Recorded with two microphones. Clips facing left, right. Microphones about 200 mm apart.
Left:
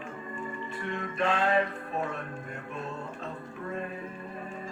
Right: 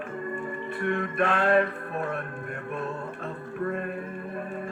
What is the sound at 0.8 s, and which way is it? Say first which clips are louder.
Music: right 5 dB; 60° right (ahead or behind).